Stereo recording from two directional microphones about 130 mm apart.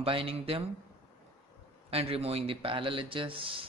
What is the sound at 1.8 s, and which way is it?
Speech, 50° right (ahead or behind).